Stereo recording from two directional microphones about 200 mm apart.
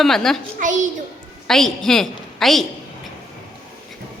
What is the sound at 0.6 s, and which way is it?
Speech, 40° right (ahead or behind).